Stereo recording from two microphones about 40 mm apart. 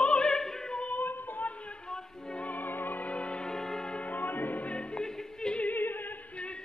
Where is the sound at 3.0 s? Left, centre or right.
Left.